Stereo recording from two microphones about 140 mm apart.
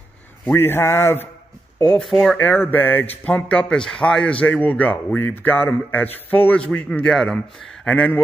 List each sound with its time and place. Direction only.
0.5 s a man's voice: 15° left (ahead or behind)
1.8 s a man's voice: 5° left (ahead or behind)